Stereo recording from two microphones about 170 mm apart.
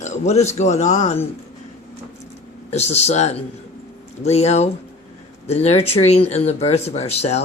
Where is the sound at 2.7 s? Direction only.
40° left (ahead or behind).